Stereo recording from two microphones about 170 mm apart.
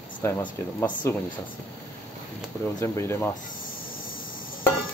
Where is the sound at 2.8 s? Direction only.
15° left (ahead or behind).